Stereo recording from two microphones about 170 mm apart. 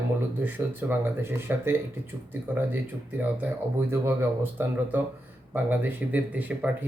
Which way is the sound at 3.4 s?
10° right (ahead or behind).